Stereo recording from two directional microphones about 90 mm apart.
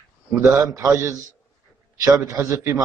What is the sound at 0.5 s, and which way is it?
Speech, 35° right (ahead or behind).